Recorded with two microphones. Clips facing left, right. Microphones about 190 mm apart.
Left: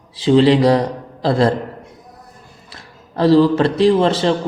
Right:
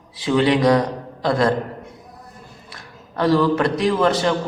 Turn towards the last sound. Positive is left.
turn(degrees=25)  # may be behind; listen again after turning